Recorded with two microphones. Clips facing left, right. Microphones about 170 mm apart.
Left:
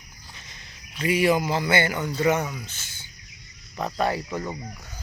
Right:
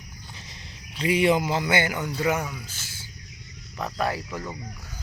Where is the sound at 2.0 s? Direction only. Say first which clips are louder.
Left 3 dB; centre (ahead or behind).